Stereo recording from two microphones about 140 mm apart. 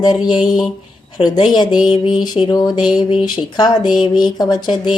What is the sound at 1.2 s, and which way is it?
A woman's voice, 35° left (ahead or behind).